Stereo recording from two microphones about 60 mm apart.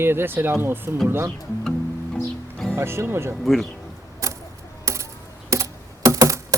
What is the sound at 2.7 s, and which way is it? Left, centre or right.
Speech, right.